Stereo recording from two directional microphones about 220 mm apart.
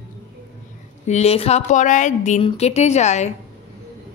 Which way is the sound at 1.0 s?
30° left (ahead or behind).